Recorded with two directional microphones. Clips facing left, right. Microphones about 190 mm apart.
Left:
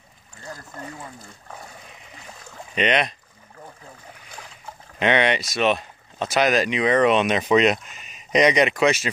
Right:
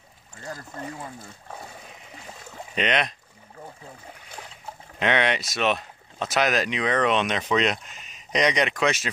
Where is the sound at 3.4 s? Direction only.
25° right (ahead or behind).